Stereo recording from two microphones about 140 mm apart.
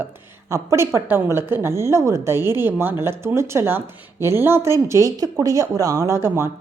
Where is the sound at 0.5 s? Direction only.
20° right (ahead or behind).